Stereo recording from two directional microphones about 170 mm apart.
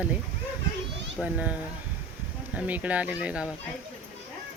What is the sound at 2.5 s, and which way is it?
Speech, 10° right (ahead or behind).